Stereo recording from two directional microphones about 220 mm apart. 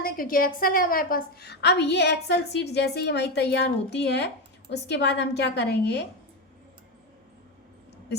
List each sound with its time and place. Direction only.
0.0 s a woman's voice: 40° left (ahead or behind)